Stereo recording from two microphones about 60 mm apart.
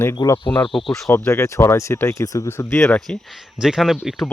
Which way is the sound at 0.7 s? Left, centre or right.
Centre.